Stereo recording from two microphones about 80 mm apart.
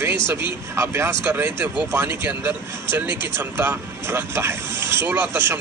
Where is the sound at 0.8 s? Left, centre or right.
Right.